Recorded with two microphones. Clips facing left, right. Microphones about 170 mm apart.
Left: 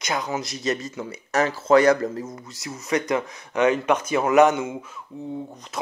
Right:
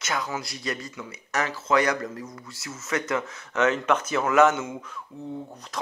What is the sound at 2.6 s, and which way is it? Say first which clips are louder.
Speech: left 5 dB; 15° left (ahead or behind).